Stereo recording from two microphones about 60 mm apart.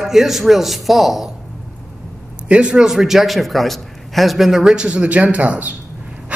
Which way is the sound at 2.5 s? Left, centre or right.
Centre.